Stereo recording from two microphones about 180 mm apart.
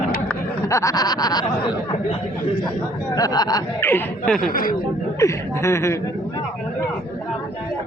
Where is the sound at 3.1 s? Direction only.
20° left (ahead or behind); by 4.5 s 5° left (ahead or behind).